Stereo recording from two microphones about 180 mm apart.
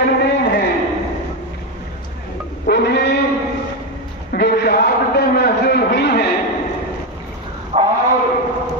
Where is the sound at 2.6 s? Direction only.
70° left (ahead or behind).